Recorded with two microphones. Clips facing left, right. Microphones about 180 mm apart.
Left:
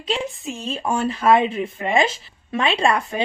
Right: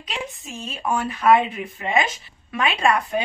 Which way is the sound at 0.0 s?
30° left (ahead or behind).